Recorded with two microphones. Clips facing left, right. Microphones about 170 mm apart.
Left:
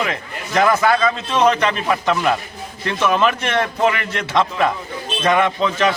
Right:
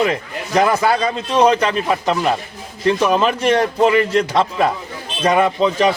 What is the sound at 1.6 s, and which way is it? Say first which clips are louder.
A man's voice: right 1 dB; 30° right (ahead or behind).